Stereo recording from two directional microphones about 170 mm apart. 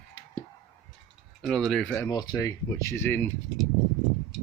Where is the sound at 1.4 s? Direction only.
Centre (ahead or behind).